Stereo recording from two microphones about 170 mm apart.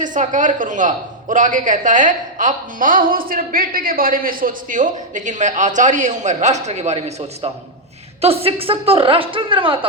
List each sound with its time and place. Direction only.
0.0 s speech: 50° right (ahead or behind); by 9.7 s 30° right (ahead or behind)